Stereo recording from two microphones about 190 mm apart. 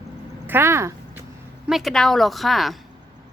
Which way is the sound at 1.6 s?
Centre (ahead or behind).